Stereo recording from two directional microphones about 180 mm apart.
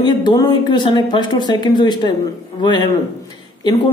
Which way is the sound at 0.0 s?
25° left (ahead or behind).